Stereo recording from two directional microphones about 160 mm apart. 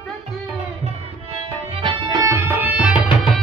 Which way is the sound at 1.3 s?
35° right (ahead or behind).